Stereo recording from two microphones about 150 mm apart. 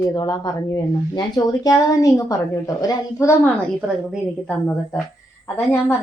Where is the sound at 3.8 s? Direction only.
5° right (ahead or behind).